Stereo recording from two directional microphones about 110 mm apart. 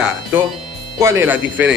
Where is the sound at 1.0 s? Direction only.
20° right (ahead or behind).